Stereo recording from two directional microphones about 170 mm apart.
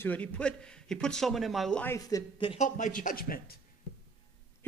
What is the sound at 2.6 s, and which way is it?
Speech, 45° left (ahead or behind).